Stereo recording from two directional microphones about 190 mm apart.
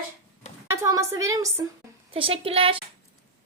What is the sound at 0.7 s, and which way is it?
Speech, 15° right (ahead or behind).